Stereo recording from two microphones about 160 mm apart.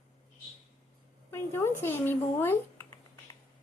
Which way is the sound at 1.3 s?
15° left (ahead or behind).